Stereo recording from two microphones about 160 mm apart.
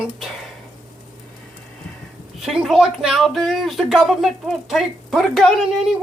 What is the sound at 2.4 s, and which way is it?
Speech, centre (ahead or behind).